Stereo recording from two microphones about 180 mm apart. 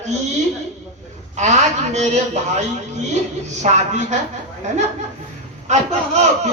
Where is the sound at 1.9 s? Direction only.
40° right (ahead or behind).